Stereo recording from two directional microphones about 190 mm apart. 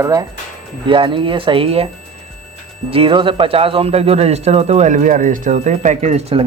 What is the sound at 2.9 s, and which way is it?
Speech, 25° right (ahead or behind).